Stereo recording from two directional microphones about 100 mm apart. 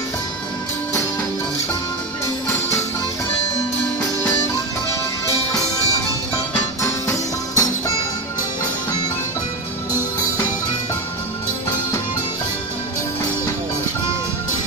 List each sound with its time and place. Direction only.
2.4 s music: 25° left (ahead or behind)
4.0 s music: 30° left (ahead or behind)
6.8 s music: 30° left (ahead or behind)